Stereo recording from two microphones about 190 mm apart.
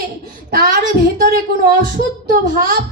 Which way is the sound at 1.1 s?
50° right (ahead or behind).